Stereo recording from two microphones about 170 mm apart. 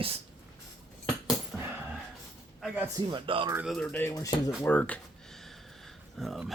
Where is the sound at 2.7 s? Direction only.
20° right (ahead or behind).